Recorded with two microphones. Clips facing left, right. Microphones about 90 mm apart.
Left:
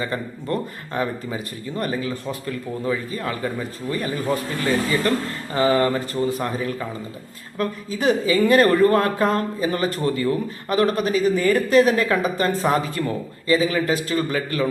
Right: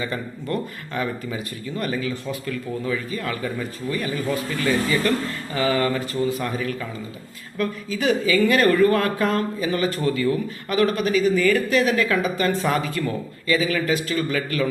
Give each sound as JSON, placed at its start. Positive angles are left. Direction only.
{"t": 0.0, "sound": "a man's voice", "side_deg": 35}